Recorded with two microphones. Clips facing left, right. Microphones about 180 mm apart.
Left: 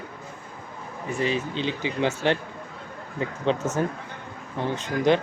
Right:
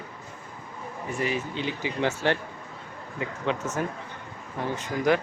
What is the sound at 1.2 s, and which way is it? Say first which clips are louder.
Speech: left 3 dB; 25° left (ahead or behind).